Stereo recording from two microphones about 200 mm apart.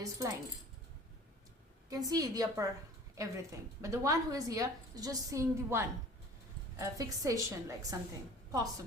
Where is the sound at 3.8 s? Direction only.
15° right (ahead or behind).